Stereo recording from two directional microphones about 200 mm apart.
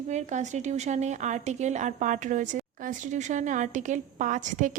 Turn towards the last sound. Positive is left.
turn(degrees=-40)  # may be behind; listen again after turning